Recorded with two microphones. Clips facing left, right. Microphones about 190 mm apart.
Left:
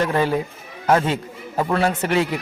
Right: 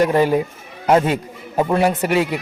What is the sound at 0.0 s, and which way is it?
A man's voice, 15° right (ahead or behind).